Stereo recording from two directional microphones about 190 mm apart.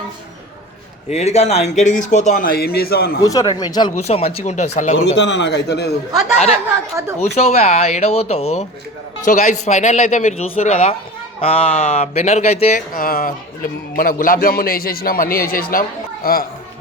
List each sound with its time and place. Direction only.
1.1 s speech: 35° left (ahead or behind); by 3.2 s 55° left (ahead or behind)
3.2 s speech: 20° left (ahead or behind)
3.9 s speech: 35° left (ahead or behind)
5.1 s a man's voice: 70° left (ahead or behind)
7.3 s speech: 35° left (ahead or behind)
13.0 s a man's voice: 50° left (ahead or behind)